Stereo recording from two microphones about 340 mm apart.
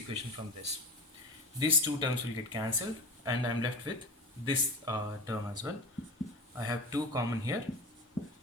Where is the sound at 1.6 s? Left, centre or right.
Centre.